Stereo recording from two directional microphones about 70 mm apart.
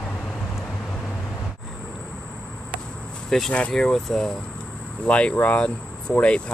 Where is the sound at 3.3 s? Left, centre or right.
Centre.